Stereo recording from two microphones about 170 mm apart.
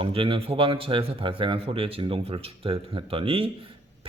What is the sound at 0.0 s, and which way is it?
Speech, 30° right (ahead or behind).